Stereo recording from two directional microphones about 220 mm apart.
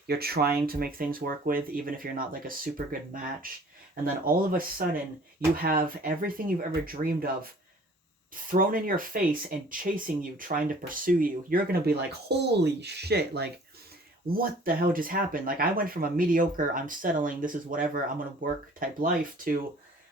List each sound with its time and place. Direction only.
0.1 s speech: 45° right (ahead or behind)
5.6 s speech: 40° right (ahead or behind)